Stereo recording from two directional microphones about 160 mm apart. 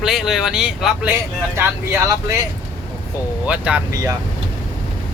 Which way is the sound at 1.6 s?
15° right (ahead or behind).